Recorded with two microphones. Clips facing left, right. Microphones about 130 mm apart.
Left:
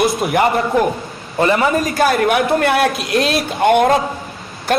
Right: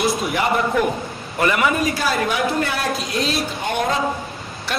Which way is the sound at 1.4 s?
30° left (ahead or behind).